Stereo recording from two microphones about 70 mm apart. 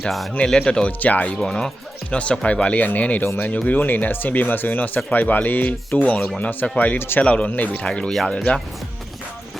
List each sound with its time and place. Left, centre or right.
0.3 s speech: centre
1.4 s speech: centre; by 6.0 s left
6.1 s speech: centre
7.8 s speech: centre